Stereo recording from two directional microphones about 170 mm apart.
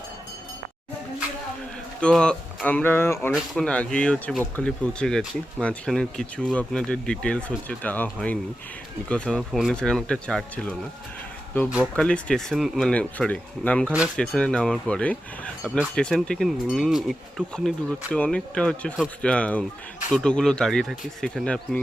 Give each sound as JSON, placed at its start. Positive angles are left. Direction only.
{"t": 2.0, "sound": "speech", "side_deg": 5}
{"t": 11.9, "sound": "speech", "side_deg": 5}